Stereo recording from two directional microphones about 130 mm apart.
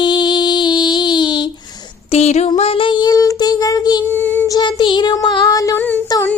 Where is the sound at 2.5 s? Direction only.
50° left (ahead or behind); by 4.0 s 30° left (ahead or behind).